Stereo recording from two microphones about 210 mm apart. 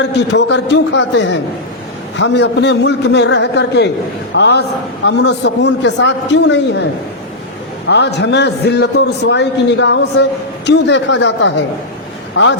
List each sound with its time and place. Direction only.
0.0 s a man's voice: 55° left (ahead or behind)
7.9 s a man's voice: 55° left (ahead or behind)